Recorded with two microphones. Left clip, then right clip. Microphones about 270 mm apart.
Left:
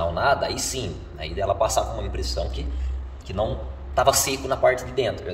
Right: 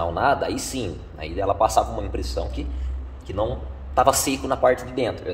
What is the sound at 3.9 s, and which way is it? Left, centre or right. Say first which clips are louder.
A man's voice: right 1 dB; right.